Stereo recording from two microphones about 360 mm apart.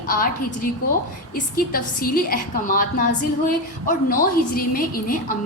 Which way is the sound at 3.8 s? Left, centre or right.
Left.